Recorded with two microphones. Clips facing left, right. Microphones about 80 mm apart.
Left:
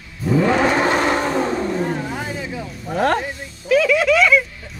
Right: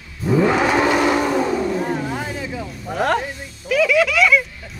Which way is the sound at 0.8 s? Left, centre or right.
Left.